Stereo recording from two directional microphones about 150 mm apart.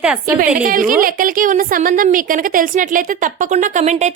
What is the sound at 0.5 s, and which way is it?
A woman's voice, 65° right (ahead or behind).